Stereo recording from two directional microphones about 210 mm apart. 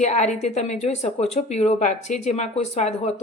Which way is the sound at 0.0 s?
35° left (ahead or behind).